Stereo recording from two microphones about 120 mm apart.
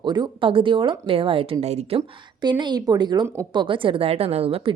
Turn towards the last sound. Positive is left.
turn(degrees=-50)  # may be behind; listen again after turning